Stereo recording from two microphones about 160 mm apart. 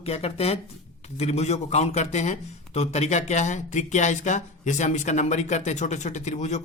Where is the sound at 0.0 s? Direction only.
40° left (ahead or behind).